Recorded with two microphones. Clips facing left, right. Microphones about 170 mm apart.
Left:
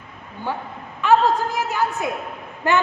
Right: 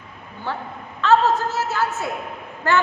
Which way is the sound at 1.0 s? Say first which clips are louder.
Even; 15° left (ahead or behind).